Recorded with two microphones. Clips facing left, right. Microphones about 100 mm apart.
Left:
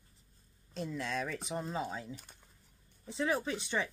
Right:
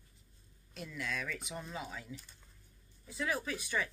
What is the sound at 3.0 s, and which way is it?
Speech, 30° left (ahead or behind).